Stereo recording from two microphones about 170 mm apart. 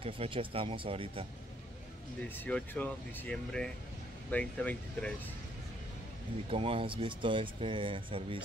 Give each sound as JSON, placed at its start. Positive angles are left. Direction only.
{"t": 0.0, "sound": "speech", "side_deg": -30}
{"t": 2.2, "sound": "speech", "side_deg": 10}
{"t": 6.5, "sound": "speech", "side_deg": -35}